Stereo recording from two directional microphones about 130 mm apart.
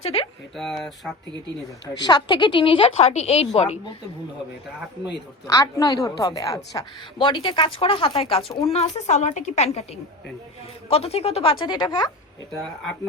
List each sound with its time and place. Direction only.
0.0 s speech: 50° left (ahead or behind)
0.5 s speech: centre (ahead or behind)
2.0 s speech: 35° left (ahead or behind); by 3.8 s 55° left (ahead or behind)
5.5 s a woman's voice: 25° left (ahead or behind)
7.2 s a woman's voice: 40° left (ahead or behind)